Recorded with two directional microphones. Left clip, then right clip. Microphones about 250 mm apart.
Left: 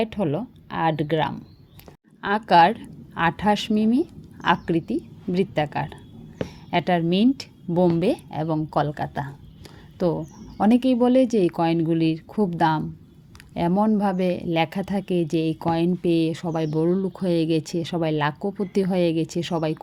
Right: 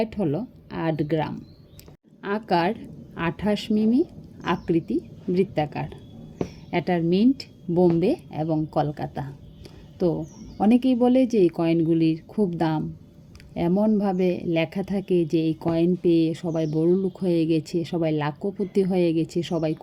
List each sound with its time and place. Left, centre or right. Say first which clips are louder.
0.0 s a woman's voice: left 1 dB; centre